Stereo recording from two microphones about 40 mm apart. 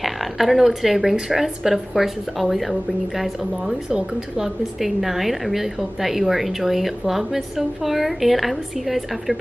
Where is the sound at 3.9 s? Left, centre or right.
Centre.